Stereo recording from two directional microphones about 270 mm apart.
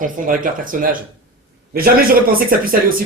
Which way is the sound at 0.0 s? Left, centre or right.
Right.